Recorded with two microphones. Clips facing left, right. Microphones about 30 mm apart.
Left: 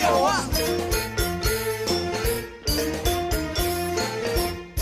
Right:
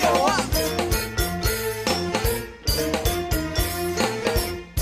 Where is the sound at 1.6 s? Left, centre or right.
Right.